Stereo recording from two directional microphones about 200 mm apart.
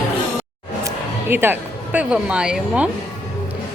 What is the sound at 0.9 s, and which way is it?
Speech, 10° right (ahead or behind).